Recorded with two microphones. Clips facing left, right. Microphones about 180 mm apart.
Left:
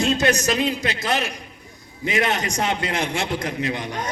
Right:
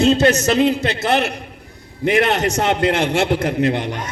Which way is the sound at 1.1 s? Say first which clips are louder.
Right 8 dB; 60° right (ahead or behind).